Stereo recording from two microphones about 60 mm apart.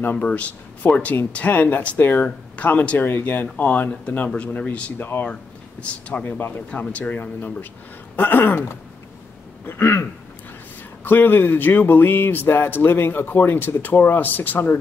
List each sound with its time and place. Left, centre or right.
0.0 s speech: left
4.9 s speech: left
5.2 s speech: left
6.2 s speech: left
11.1 s speech: left